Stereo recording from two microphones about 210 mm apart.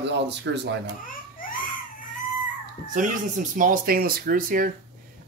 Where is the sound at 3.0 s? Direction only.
40° right (ahead or behind).